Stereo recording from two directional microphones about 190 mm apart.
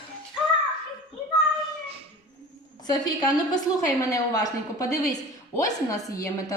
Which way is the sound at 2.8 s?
20° left (ahead or behind).